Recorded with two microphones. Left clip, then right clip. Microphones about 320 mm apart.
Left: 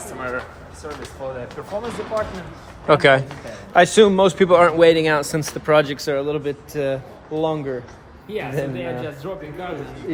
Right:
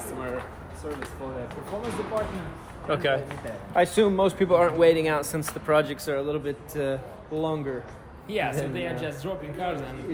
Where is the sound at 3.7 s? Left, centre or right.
Left.